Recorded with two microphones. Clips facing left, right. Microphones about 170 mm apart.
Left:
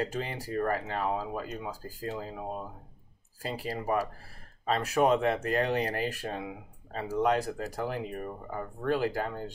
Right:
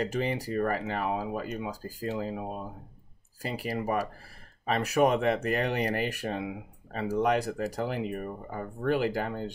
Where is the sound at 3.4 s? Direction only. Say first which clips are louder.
Right 2 dB; 15° right (ahead or behind).